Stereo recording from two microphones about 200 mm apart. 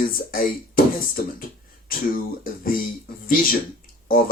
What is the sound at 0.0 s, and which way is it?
Speech, 45° left (ahead or behind).